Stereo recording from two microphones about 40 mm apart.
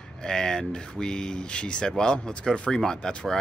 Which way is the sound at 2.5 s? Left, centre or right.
Left.